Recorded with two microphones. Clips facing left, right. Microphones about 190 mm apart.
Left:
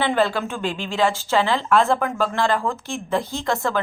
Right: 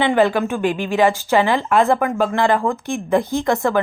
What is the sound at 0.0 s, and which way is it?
Speech, 15° right (ahead or behind).